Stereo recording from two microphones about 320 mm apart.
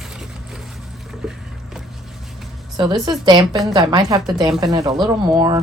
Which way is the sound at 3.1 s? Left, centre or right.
Centre.